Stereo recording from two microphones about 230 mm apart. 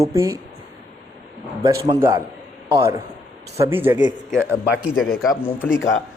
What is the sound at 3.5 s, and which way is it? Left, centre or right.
Speech, centre.